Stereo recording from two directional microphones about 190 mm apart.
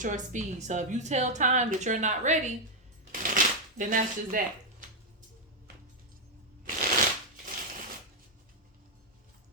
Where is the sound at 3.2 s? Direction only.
45° right (ahead or behind).